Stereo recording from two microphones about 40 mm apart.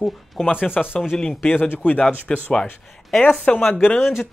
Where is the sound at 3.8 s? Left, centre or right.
Left.